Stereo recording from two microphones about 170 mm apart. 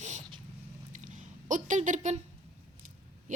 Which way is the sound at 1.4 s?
50° right (ahead or behind).